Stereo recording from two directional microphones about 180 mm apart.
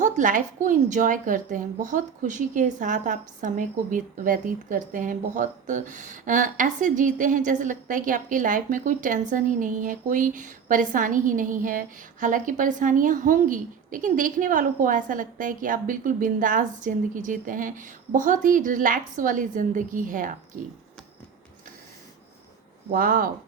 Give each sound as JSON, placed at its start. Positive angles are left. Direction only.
{"t": 0.0, "sound": "speech", "side_deg": -45}
{"t": 22.9, "sound": "speech", "side_deg": -50}